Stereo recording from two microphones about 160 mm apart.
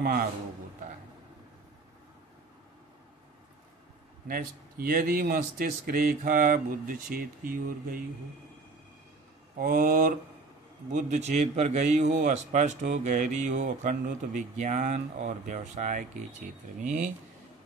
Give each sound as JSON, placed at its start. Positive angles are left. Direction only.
{"t": 0.0, "sound": "speech", "side_deg": -65}
{"t": 4.3, "sound": "speech", "side_deg": -65}
{"t": 9.6, "sound": "speech", "side_deg": -65}
{"t": 10.9, "sound": "a man's voice", "side_deg": -50}